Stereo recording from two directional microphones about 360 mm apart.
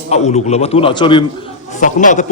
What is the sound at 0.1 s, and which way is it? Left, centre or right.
A man's voice, centre.